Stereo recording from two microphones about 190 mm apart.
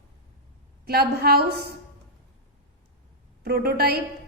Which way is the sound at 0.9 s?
55° right (ahead or behind).